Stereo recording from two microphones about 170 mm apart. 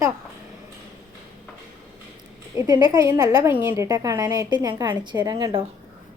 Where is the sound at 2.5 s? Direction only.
20° right (ahead or behind).